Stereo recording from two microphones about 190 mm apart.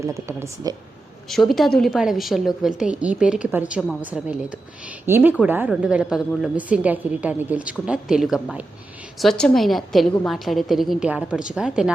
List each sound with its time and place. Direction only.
0.0 s a woman's voice: 15° right (ahead or behind)
1.3 s a woman's voice: centre (ahead or behind)